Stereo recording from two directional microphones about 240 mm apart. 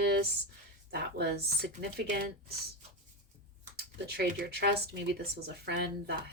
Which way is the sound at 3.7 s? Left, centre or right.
Right.